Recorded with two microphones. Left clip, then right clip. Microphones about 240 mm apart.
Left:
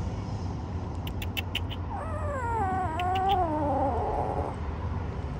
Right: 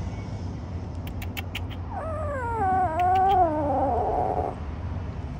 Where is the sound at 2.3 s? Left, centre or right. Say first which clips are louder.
Right 5 dB; centre.